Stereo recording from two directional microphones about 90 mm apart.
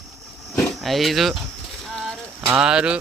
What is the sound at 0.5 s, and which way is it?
Speech, centre (ahead or behind).